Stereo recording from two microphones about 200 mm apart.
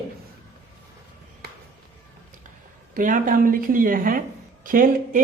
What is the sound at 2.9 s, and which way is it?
Speech, 40° right (ahead or behind).